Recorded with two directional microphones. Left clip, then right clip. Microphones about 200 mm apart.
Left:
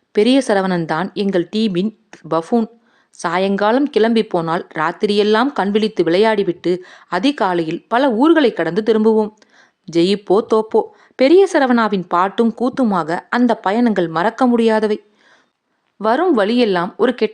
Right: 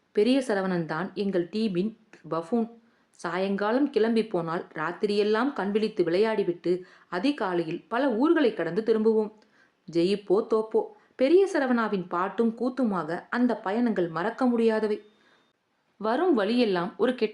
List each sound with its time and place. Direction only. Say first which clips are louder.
0.1 s speech: left 10 dB; 35° left (ahead or behind)